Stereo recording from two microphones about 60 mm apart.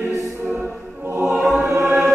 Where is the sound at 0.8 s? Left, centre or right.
Right.